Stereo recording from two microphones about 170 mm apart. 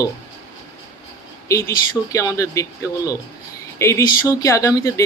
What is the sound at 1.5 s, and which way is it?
Speech, 20° left (ahead or behind).